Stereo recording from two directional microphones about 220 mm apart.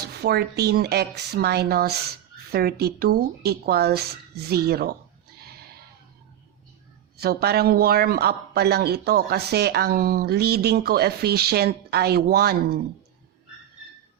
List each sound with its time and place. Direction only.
0.1 s a man's voice: 45° right (ahead or behind)
5.4 s horse: 45° right (ahead or behind)
7.2 s a man's voice: 45° right (ahead or behind)